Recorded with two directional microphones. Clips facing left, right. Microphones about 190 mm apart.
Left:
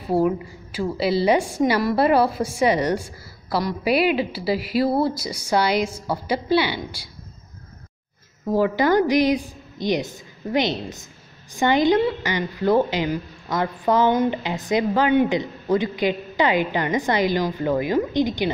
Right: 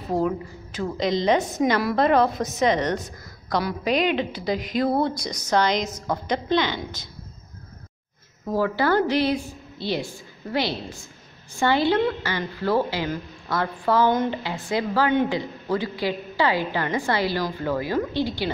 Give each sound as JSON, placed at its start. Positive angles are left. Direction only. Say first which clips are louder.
{"t": 0.1, "sound": "a woman's voice", "louder": "left 4 dB", "side_deg": 10}
{"t": 1.8, "sound": "a woman's voice", "louder": "left 1 dB", "side_deg": 0}
{"t": 8.5, "sound": "a woman's voice", "louder": "left 3 dB", "side_deg": 15}